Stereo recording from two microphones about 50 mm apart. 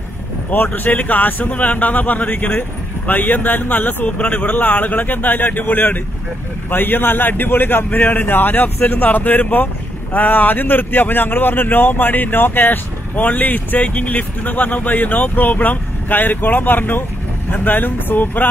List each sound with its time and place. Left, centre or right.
0.5 s speech: left